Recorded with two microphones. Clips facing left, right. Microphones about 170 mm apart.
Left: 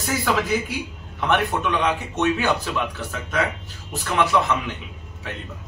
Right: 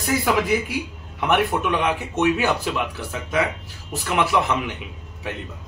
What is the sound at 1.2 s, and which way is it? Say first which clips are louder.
A man's voice: right 1 dB; 10° right (ahead or behind).